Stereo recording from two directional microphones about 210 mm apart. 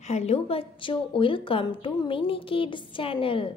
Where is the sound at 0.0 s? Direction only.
30° left (ahead or behind).